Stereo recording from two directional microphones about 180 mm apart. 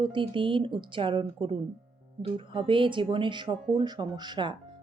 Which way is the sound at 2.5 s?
30° right (ahead or behind).